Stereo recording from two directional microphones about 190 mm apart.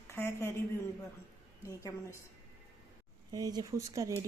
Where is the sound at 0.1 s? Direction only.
15° left (ahead or behind).